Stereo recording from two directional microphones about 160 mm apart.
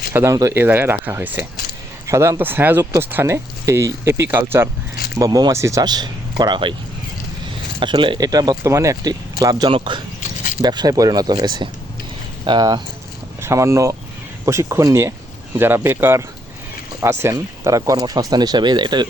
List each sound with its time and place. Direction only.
0.1 s speech: 15° right (ahead or behind)
7.8 s speech: 30° right (ahead or behind)